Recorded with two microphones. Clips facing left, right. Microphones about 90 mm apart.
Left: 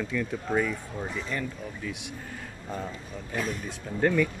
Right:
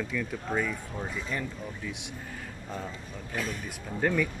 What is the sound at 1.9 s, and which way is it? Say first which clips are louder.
Speech: left 2 dB; 20° right (ahead or behind).